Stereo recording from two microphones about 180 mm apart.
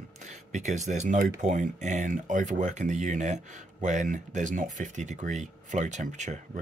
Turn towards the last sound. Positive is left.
turn(degrees=-40)  # may be behind; listen again after turning